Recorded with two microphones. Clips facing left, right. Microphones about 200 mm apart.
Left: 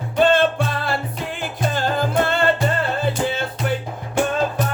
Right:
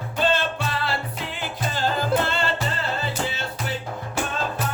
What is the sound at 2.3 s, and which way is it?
Music, 55° left (ahead or behind).